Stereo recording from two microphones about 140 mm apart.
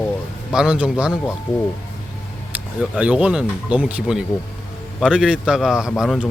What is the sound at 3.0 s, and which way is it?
Speech, 5° right (ahead or behind).